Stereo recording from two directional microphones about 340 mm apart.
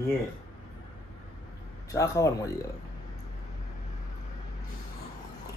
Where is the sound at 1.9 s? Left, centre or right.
Centre.